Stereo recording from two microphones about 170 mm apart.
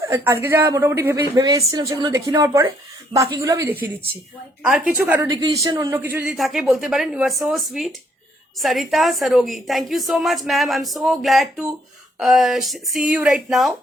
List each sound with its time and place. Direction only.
0.0 s speech: 15° right (ahead or behind)
5.2 s a woman's voice: 20° right (ahead or behind); by 13.7 s centre (ahead or behind)